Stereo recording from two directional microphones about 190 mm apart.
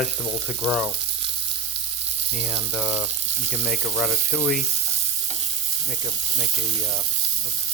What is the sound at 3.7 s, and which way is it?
Speech, centre (ahead or behind).